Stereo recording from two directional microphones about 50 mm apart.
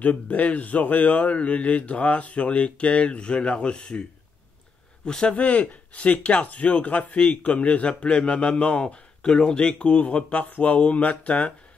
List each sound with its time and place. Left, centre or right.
0.0 s speech: left
5.0 s speech: centre